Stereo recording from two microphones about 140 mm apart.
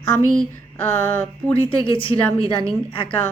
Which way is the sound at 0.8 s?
15° left (ahead or behind).